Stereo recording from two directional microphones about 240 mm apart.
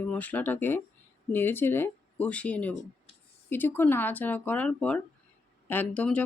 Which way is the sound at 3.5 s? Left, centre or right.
Centre.